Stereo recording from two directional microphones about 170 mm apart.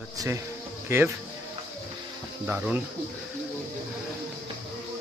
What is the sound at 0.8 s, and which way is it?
Speech, 15° right (ahead or behind).